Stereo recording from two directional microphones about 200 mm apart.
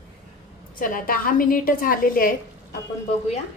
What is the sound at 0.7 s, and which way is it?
A woman's voice, 45° left (ahead or behind).